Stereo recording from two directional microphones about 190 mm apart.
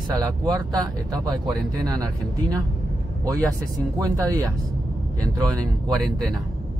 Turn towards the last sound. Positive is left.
turn(degrees=-20)  # may be behind; listen again after turning